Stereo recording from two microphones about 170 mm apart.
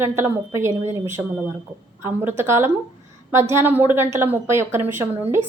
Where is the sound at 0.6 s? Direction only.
45° right (ahead or behind).